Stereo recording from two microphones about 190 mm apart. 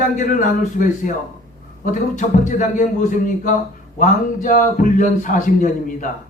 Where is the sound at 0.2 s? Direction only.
40° left (ahead or behind).